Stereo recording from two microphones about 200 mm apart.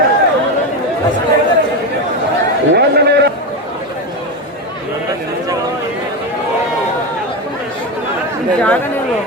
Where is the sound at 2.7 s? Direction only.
55° right (ahead or behind).